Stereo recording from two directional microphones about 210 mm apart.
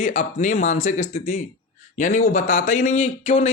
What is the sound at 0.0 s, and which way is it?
Speech, 35° left (ahead or behind).